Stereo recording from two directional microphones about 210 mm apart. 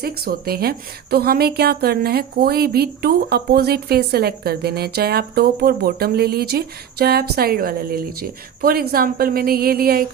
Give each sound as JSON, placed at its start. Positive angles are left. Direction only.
{"t": 0.0, "sound": "a woman's voice", "side_deg": -45}